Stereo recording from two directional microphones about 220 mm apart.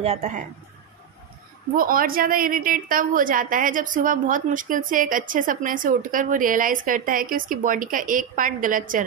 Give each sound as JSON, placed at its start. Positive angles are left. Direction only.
{"t": 0.0, "sound": "a woman's voice", "side_deg": -30}
{"t": 1.8, "sound": "a woman's voice", "side_deg": -40}